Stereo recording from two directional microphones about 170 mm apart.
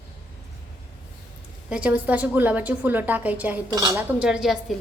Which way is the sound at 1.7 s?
10° right (ahead or behind).